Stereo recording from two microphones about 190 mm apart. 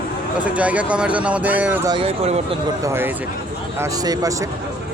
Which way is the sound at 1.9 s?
30° right (ahead or behind).